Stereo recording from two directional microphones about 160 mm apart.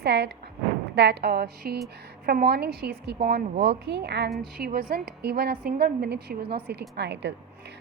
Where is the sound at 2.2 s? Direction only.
75° right (ahead or behind); by 4.3 s 90° right.